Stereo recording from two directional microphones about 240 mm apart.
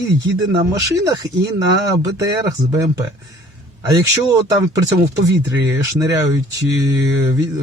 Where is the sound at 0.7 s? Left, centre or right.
Centre.